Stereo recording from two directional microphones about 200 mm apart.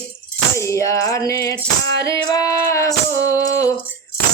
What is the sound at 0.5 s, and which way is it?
Music, 15° left (ahead or behind).